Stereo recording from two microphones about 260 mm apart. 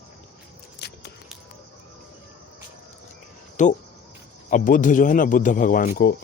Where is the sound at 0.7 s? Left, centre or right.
Left.